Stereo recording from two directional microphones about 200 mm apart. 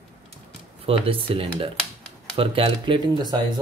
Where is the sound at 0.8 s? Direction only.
25° right (ahead or behind).